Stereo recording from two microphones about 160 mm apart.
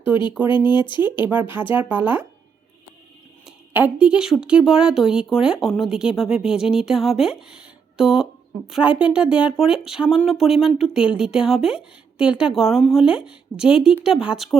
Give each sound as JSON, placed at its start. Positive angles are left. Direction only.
{"t": 0.1, "sound": "speech", "side_deg": -10}
{"t": 0.5, "sound": "speech", "side_deg": 30}
{"t": 1.7, "sound": "speech", "side_deg": -10}
{"t": 3.4, "sound": "speech", "side_deg": -10}